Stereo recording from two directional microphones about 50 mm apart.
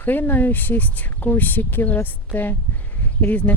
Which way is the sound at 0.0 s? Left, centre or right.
Left.